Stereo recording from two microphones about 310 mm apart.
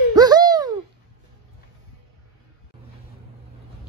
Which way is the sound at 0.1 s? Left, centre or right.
Centre.